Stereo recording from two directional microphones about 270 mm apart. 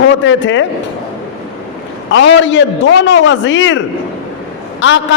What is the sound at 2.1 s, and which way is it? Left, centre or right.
A man's voice, left.